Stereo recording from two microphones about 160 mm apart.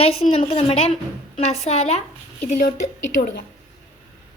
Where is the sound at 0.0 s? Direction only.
40° left (ahead or behind).